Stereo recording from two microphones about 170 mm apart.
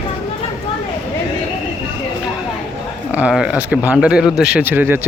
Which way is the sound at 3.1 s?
5° right (ahead or behind).